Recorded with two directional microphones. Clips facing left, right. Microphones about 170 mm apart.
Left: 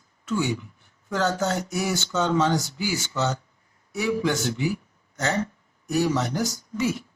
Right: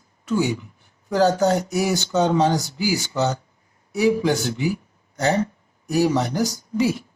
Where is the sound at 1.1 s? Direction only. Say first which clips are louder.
Right 7 dB; 35° right (ahead or behind).